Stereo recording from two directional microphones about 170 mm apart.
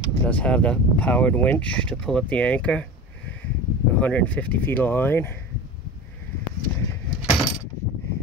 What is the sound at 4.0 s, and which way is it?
Speech, 10° left (ahead or behind).